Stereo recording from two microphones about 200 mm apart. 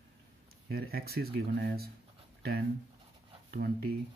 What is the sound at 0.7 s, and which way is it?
Speech, 50° right (ahead or behind).